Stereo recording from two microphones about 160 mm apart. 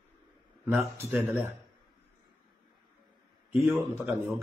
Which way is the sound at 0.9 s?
15° right (ahead or behind).